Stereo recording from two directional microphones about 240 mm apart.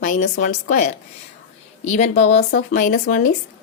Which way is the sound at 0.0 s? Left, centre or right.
Left.